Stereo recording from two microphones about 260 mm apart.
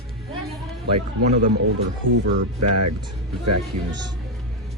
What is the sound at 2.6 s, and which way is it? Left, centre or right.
Speech, right.